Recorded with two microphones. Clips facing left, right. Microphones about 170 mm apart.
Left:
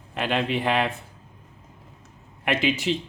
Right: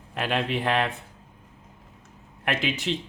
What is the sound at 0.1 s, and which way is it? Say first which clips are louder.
Speech: left 2 dB; centre (ahead or behind).